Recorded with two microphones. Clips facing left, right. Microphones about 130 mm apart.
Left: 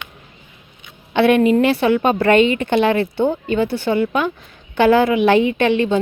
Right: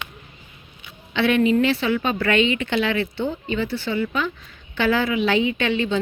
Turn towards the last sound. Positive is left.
turn(degrees=50)  # may be behind; listen again after turning